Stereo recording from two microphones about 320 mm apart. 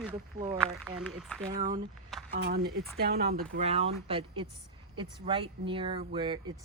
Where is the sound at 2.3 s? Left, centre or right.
Right.